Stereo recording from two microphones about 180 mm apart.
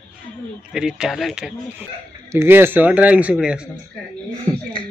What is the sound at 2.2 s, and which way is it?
Speech, 15° right (ahead or behind).